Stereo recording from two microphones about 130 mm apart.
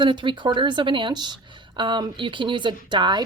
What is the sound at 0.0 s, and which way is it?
Speech, 40° right (ahead or behind).